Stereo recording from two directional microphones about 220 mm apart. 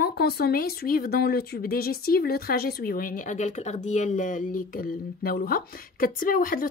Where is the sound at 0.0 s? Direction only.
45° left (ahead or behind).